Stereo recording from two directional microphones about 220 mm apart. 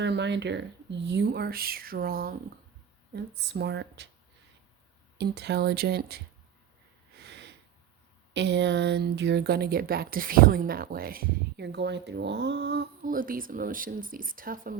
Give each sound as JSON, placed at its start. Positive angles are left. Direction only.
{"t": 0.0, "sound": "speech", "side_deg": -50}
{"t": 3.5, "sound": "speech", "side_deg": -50}
{"t": 5.1, "sound": "speech", "side_deg": -50}
{"t": 7.2, "sound": "snort", "side_deg": -50}
{"t": 8.3, "sound": "speech", "side_deg": -50}